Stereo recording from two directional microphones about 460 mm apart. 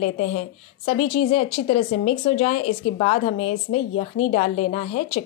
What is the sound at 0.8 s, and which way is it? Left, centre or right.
Speech, centre.